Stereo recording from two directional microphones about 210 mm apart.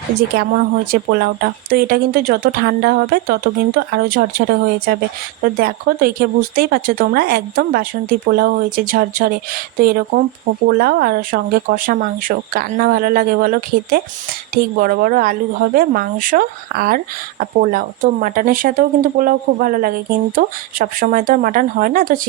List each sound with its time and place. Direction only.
0.2 s speech: 45° right (ahead or behind)